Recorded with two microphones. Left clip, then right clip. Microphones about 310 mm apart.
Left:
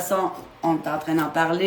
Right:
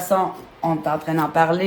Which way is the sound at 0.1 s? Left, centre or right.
Centre.